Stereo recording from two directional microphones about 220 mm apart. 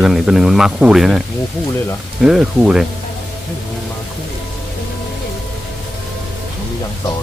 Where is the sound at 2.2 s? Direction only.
Centre (ahead or behind).